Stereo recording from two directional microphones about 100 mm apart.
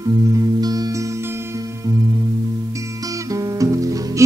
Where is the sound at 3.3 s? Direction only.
35° right (ahead or behind).